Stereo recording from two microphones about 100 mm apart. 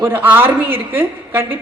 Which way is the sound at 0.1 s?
20° right (ahead or behind).